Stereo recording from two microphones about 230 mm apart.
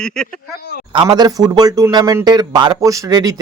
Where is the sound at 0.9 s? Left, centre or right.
Centre.